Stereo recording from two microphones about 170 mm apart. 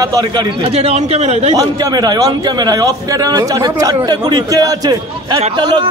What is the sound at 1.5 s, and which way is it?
A man's voice, 20° right (ahead or behind).